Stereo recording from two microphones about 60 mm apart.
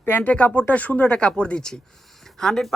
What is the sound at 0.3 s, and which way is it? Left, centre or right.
Speech, left.